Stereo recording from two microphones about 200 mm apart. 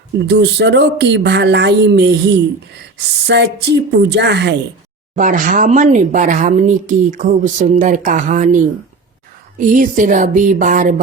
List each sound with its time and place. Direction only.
0.3 s speech: 55° right (ahead or behind)
5.1 s speech: 40° right (ahead or behind)